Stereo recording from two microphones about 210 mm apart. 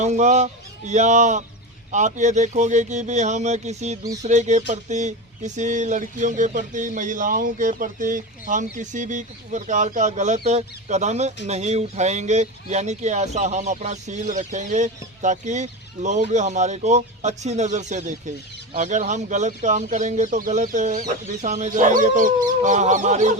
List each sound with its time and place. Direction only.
0.0 s speech: 35° right (ahead or behind)